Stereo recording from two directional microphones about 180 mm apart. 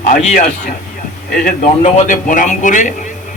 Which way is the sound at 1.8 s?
40° left (ahead or behind).